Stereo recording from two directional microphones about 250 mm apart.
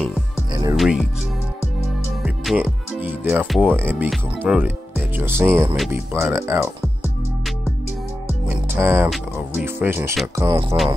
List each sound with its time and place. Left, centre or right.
0.5 s music: centre
0.7 s speech: centre
2.2 s speech: centre
8.7 s speech: centre